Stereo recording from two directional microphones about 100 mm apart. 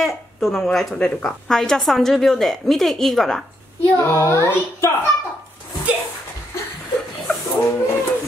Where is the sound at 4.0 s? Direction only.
30° left (ahead or behind).